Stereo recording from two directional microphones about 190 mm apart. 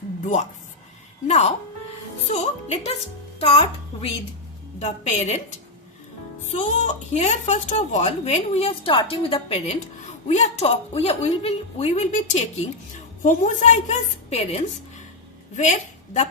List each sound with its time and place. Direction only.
1.3 s a child's voice: 35° left (ahead or behind)
6.4 s a woman's voice: 40° left (ahead or behind)